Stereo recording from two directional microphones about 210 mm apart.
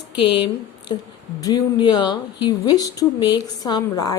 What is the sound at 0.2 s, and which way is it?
A woman's voice, 20° left (ahead or behind).